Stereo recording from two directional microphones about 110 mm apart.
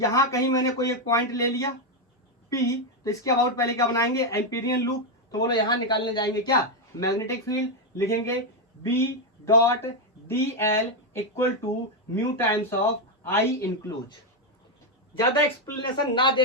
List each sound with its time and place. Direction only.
0.0 s speech: 30° left (ahead or behind)
5.3 s speech: 40° left (ahead or behind); by 13.9 s 25° left (ahead or behind)
15.4 s speech: 20° left (ahead or behind)
16.1 s speech: 50° left (ahead or behind)